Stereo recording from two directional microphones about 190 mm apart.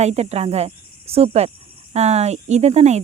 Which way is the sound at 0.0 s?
35° right (ahead or behind).